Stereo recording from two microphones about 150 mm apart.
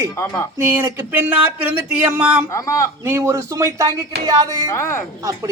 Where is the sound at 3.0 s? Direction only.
15° right (ahead or behind).